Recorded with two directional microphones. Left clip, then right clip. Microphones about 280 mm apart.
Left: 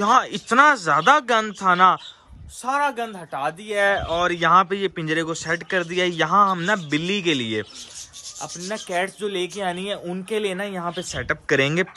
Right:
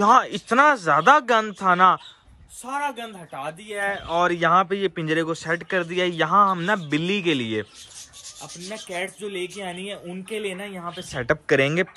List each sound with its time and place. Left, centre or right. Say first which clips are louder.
0.0 s a man's voice: right 1 dB; centre
2.6 s rub: left 6 dB; centre
3.7 s a woman's voice: left 7 dB; left
4.1 s a man's voice: right 3 dB; centre
8.4 s rub: left 6 dB; centre
10.8 s a woman's voice: left 5 dB; left
11.1 s a man's voice: right 1 dB; centre